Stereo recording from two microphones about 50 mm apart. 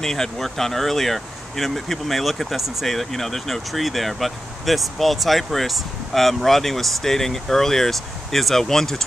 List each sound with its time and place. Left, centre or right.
0.0 s speech: centre